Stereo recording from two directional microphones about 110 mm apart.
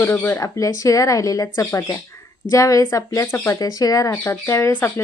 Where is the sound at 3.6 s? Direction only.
35° left (ahead or behind); by 5.0 s 15° left (ahead or behind).